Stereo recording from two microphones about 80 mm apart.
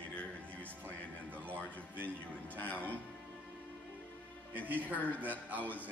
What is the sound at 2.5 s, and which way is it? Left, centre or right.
Speech, centre.